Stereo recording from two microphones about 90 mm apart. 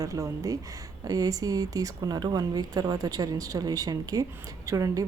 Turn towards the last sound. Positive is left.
turn(degrees=-40)  # may be behind; listen again after turning